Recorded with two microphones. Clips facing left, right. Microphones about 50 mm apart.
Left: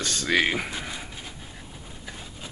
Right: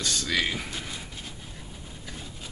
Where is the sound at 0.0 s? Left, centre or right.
Left.